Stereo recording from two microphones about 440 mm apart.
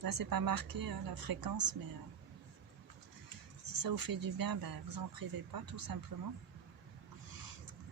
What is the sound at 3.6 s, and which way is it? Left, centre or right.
Speech, right.